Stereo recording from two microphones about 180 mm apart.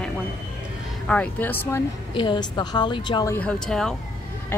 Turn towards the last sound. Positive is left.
turn(degrees=5)  # may be behind; listen again after turning